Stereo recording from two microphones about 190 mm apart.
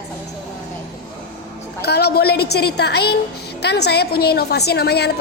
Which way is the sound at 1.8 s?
60° left (ahead or behind).